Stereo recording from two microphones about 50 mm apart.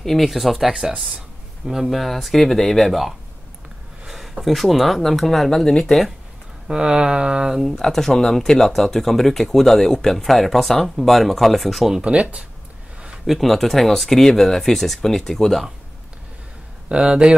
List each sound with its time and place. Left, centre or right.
0.0 s speech: centre
6.7 s a sound: centre
7.7 s speech: centre
12.0 s speech: right
13.3 s speech: centre
16.9 s a sound: centre